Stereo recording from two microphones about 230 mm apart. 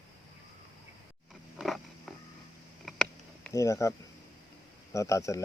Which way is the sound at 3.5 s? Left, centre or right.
Centre.